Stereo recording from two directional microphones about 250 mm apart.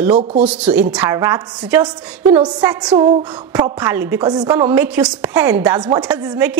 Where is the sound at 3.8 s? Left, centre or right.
Centre.